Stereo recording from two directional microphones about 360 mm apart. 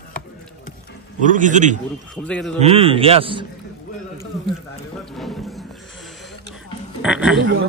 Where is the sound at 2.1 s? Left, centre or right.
Centre.